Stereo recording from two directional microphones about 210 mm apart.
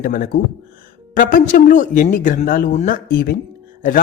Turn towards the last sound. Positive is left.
turn(degrees=40)  # may be behind; listen again after turning